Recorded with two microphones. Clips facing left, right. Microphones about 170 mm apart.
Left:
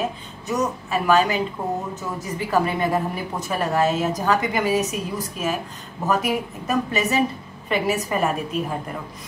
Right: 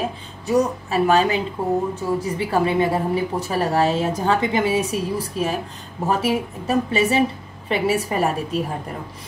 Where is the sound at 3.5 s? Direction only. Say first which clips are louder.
Right 1 dB; 35° right (ahead or behind).